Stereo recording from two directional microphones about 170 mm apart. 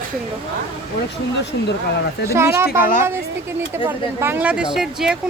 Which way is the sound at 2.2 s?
15° right (ahead or behind).